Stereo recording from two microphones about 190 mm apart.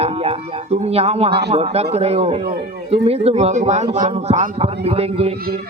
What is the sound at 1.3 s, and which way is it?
Speech, 60° right (ahead or behind).